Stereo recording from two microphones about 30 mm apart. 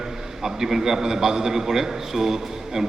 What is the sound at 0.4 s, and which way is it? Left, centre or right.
A man's voice, centre.